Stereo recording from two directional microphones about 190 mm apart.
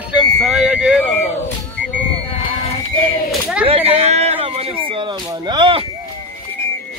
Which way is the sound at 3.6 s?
30° right (ahead or behind).